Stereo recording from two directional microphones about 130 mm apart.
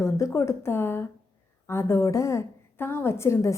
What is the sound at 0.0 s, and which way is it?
A woman's voice, 25° left (ahead or behind).